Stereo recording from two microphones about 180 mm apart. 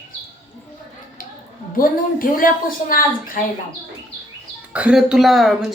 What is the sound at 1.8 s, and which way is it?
A woman's voice, 50° left (ahead or behind).